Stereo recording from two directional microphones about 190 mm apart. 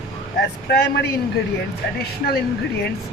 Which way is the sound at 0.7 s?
60° left (ahead or behind).